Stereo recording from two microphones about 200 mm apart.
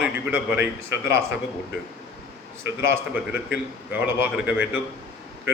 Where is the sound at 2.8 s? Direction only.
10° right (ahead or behind).